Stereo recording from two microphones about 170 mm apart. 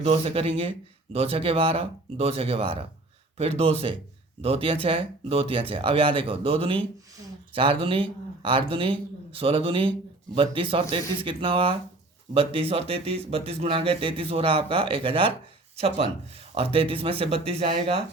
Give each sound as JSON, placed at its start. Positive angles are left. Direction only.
{"t": 0.0, "sound": "speech", "side_deg": -35}